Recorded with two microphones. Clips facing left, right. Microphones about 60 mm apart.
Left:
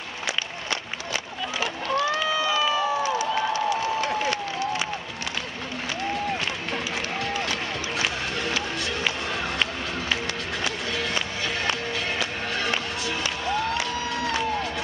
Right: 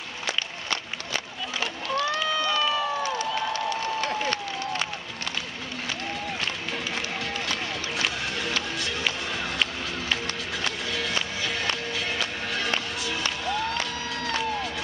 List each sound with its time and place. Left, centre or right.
1.6 s run: centre
8.0 s music: centre
10.6 s music: centre